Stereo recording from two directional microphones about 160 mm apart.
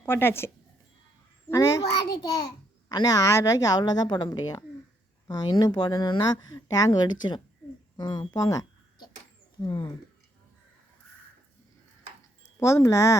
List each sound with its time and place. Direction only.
0.0 s speech: 15° left (ahead or behind)
12.5 s speech: 20° left (ahead or behind)